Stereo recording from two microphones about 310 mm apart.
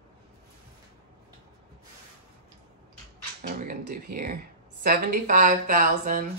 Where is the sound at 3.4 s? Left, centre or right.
Right.